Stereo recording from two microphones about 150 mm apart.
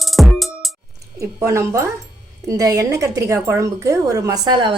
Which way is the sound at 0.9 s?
20° right (ahead or behind).